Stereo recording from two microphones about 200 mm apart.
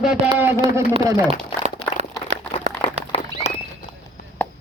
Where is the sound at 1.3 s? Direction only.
35° right (ahead or behind).